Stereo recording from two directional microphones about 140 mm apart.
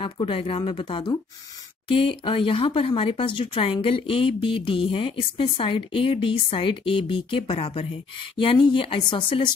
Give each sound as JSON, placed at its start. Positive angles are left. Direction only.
{"t": 0.0, "sound": "speech", "side_deg": 40}